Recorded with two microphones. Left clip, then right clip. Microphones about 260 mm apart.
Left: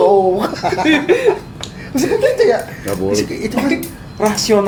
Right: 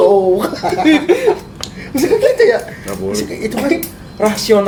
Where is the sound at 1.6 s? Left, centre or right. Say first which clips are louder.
Right 3 dB; right.